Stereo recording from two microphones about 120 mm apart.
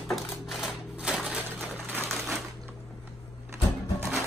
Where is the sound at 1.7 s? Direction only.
15° right (ahead or behind).